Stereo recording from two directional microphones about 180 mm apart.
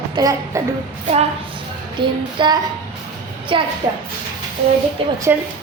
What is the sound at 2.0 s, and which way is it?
Child singing, 25° right (ahead or behind).